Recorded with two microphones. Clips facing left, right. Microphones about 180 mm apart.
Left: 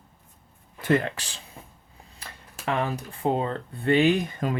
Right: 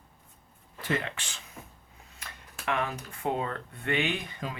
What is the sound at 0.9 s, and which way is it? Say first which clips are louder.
Speech: left 8 dB; 40° left (ahead or behind).